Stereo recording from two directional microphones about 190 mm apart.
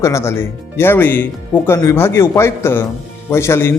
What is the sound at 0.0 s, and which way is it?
Speech, 15° left (ahead or behind).